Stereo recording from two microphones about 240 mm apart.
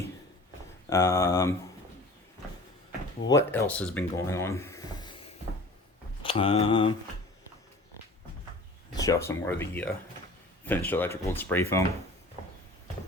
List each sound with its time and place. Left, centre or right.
0.9 s speech: centre
3.2 s speech: centre
9.0 s speech: centre